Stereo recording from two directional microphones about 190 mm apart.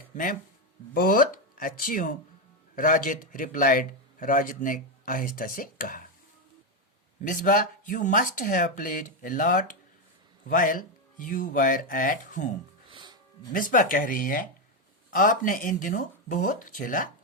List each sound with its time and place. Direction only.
0.9 s a man's voice: 45° left (ahead or behind)
7.3 s a man's voice: 45° left (ahead or behind)
12.9 s music: 25° right (ahead or behind)
13.5 s a man's voice: 45° left (ahead or behind)